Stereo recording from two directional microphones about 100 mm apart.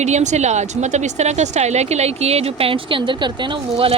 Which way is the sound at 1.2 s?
90° right.